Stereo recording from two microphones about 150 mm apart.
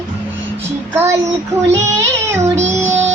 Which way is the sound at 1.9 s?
20° right (ahead or behind).